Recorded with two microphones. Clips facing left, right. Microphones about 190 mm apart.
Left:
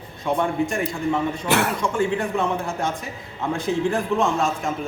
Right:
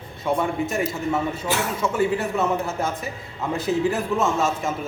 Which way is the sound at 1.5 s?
65° left (ahead or behind).